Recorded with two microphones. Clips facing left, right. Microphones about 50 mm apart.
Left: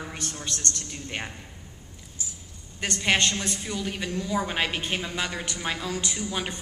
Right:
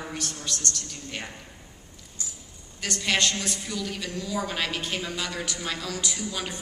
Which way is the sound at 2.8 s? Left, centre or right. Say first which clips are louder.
Left 2 dB; left.